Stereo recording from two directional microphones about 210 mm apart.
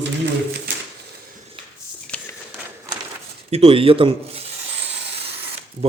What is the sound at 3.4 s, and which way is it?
Speech, 30° right (ahead or behind).